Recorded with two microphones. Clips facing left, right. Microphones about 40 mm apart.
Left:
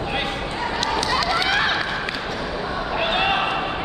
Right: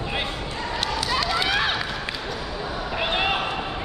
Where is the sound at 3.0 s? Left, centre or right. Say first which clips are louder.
Left 3 dB; centre.